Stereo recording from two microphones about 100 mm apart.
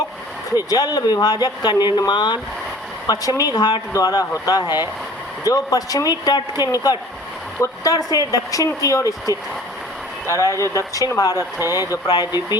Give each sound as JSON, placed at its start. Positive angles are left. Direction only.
{"t": 0.7, "sound": "speech", "side_deg": 40}